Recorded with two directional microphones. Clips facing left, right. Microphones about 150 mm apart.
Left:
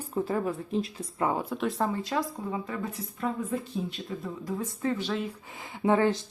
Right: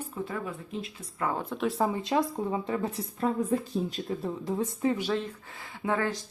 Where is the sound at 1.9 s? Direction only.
20° right (ahead or behind).